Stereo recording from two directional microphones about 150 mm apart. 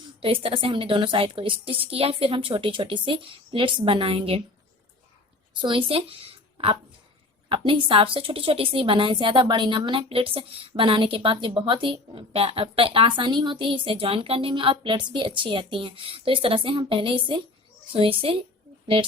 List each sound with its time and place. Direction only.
0.2 s a woman's voice: 35° right (ahead or behind)
5.5 s a woman's voice: 35° right (ahead or behind)